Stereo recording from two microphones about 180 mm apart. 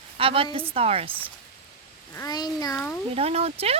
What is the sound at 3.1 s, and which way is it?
Speech, 35° right (ahead or behind).